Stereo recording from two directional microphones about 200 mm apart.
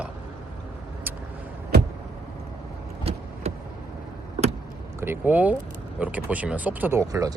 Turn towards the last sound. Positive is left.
turn(degrees=-15)  # may be behind; listen again after turning